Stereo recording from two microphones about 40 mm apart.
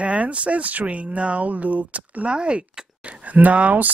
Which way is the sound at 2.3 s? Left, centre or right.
Right.